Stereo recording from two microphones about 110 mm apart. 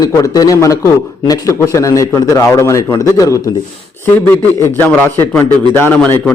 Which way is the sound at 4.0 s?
20° left (ahead or behind).